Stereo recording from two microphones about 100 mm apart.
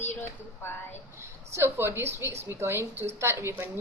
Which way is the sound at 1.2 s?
25° right (ahead or behind).